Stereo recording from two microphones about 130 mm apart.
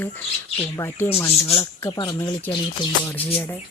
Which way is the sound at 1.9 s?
35° left (ahead or behind).